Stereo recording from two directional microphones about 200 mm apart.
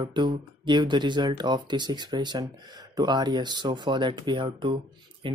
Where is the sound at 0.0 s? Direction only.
25° right (ahead or behind).